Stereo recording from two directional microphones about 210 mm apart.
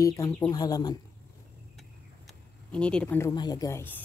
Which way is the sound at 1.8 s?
5° left (ahead or behind).